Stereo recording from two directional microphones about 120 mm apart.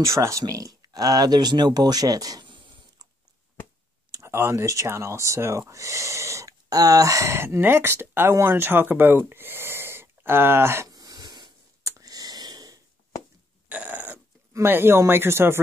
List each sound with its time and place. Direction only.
0.0 s speech: 25° right (ahead or behind); by 3.1 s 40° right (ahead or behind)
4.1 s speech: 25° right (ahead or behind)
10.9 s wheeze: 35° right (ahead or behind)
13.7 s a sound: 15° right (ahead or behind)